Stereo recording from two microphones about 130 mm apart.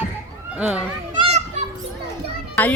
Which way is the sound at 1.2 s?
55° right (ahead or behind).